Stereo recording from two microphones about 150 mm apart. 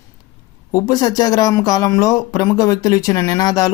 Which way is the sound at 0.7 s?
25° left (ahead or behind).